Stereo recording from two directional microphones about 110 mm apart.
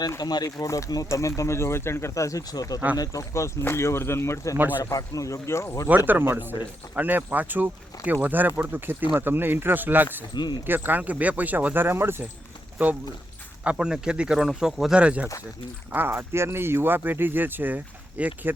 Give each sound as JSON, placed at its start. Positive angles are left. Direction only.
{"t": 0.0, "sound": "speech", "side_deg": 35}
{"t": 6.1, "sound": "speech", "side_deg": -20}
{"t": 10.3, "sound": "speech", "side_deg": 40}
{"t": 10.7, "sound": "speech", "side_deg": -15}
{"t": 13.7, "sound": "speech", "side_deg": -10}